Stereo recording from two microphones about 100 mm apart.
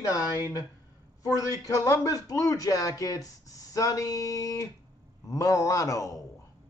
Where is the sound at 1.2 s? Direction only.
35° left (ahead or behind).